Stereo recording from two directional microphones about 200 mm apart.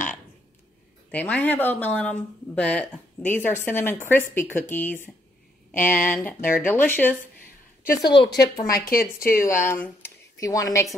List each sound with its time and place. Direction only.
1.1 s speech: 10° left (ahead or behind)
7.8 s a woman's voice: 45° left (ahead or behind)
9.4 s speech: 15° left (ahead or behind)